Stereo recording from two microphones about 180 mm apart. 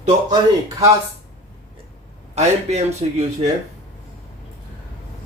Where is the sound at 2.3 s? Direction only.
40° right (ahead or behind).